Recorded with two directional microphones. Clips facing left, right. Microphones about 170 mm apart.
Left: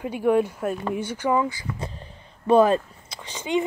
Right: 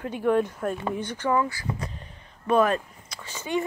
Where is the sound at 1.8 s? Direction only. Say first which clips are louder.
Left 2 dB; 30° left (ahead or behind).